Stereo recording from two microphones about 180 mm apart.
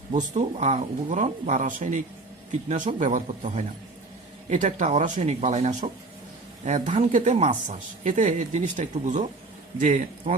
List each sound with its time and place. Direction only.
0.1 s speech: 40° right (ahead or behind)
3.0 s speech: 45° right (ahead or behind)